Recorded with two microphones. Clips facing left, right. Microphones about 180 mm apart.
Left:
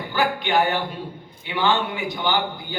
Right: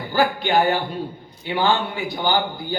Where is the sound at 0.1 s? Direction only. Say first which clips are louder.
Right 3 dB; 35° right (ahead or behind).